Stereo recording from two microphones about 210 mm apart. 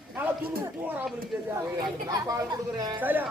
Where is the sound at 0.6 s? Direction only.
10° right (ahead or behind).